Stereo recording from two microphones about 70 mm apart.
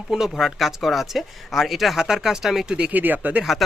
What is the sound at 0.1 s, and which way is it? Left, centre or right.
Speech, centre.